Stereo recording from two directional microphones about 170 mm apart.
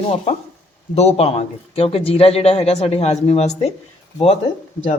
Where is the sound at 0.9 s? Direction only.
40° left (ahead or behind).